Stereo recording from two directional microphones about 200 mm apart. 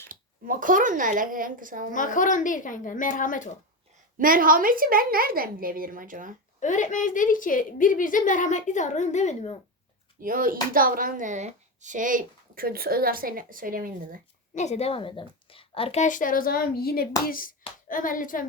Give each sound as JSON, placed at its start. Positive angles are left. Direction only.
{"t": 0.1, "sound": "speech", "side_deg": -45}
{"t": 1.9, "sound": "a woman's voice", "side_deg": 40}
{"t": 4.2, "sound": "speech", "side_deg": -45}
{"t": 6.6, "sound": "a woman's voice", "side_deg": 40}
{"t": 10.2, "sound": "speech", "side_deg": -45}
{"t": 14.5, "sound": "a woman's voice", "side_deg": 35}